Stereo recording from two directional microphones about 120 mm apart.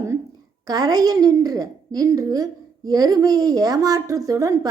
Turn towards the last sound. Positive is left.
turn(degrees=-30)  # may be behind; listen again after turning